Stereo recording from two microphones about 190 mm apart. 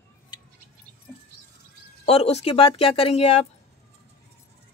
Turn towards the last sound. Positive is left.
turn(degrees=35)  # may be behind; listen again after turning